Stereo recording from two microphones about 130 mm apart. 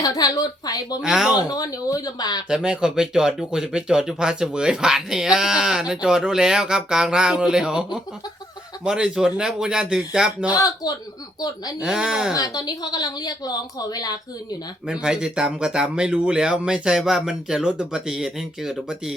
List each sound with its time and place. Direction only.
0.0 s speech: 30° left (ahead or behind)
1.0 s speech: 5° right (ahead or behind)
1.4 s speech: 25° left (ahead or behind)
2.5 s speech: 5° right (ahead or behind)
10.5 s speech: 30° left (ahead or behind)
11.8 s speech: 5° right (ahead or behind)
12.3 s speech: 30° left (ahead or behind)
14.8 s speech: 5° right (ahead or behind)